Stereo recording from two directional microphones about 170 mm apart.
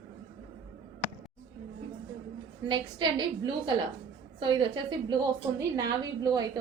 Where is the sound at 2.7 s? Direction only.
30° right (ahead or behind).